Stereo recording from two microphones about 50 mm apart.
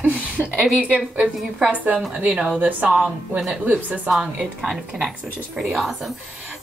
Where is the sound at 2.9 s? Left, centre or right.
Centre.